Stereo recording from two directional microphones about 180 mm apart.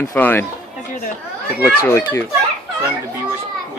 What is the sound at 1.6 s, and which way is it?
Speech, 15° left (ahead or behind).